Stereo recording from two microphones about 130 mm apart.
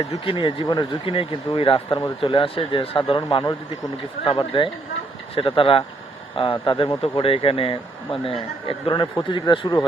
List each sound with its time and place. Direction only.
0.3 s a man's voice: 40° left (ahead or behind)